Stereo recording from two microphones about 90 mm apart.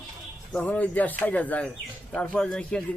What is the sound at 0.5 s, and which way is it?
Speech, 15° left (ahead or behind).